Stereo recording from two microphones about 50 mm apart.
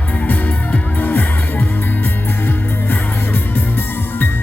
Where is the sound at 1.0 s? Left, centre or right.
Left.